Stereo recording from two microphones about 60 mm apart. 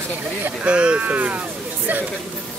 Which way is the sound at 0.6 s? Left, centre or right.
Centre.